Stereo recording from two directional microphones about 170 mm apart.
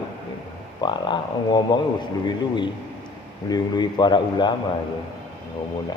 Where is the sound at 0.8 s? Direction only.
25° left (ahead or behind).